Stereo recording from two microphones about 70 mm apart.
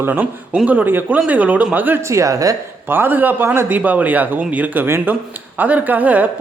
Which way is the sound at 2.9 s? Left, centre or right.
Right.